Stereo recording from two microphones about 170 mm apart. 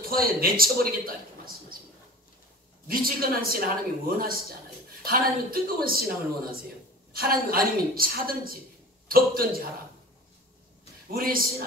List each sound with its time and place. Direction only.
0.1 s speech: 60° right (ahead or behind)
2.9 s speech: 60° right (ahead or behind)
11.1 s speech: 60° right (ahead or behind)